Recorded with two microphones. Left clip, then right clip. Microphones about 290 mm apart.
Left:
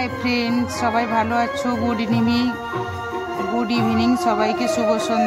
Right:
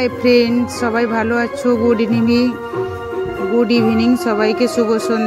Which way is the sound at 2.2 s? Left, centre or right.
Left.